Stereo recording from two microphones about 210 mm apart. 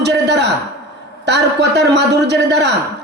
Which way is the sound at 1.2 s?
55° right (ahead or behind).